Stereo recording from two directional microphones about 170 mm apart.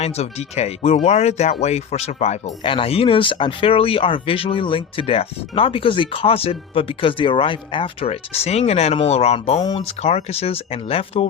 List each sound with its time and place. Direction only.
0.0 s speech: 40° left (ahead or behind)